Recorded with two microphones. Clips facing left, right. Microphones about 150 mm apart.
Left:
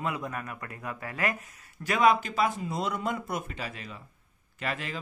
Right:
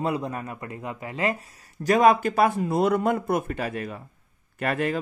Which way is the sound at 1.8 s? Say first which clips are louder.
Right 5 dB; 45° right (ahead or behind).